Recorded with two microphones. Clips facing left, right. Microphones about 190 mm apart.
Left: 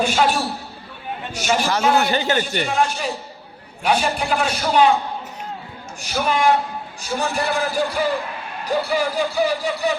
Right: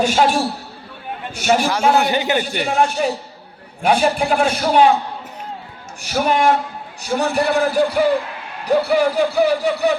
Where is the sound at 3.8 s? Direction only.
50° right (ahead or behind).